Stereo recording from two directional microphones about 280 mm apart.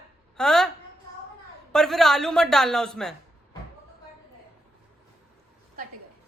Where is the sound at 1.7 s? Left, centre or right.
Centre.